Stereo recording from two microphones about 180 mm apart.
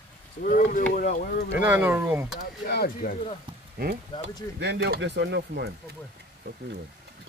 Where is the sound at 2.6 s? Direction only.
60° left (ahead or behind).